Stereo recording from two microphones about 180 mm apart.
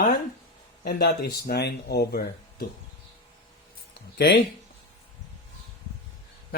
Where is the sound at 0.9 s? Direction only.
65° left (ahead or behind).